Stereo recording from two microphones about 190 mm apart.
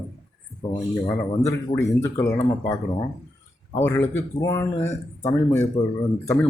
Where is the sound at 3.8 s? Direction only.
15° left (ahead or behind).